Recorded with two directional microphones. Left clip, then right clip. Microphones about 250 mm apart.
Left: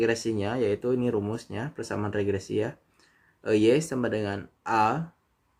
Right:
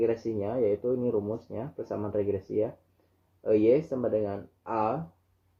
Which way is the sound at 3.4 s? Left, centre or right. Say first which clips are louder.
Left 1 dB; left.